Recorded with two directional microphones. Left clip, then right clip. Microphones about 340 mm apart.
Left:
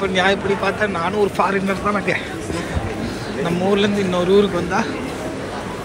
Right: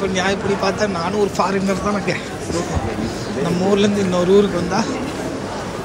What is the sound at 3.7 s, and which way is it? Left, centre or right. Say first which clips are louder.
Speech: right 1 dB; centre.